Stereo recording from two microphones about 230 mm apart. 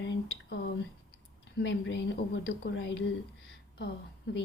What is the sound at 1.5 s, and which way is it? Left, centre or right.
A woman's voice, left.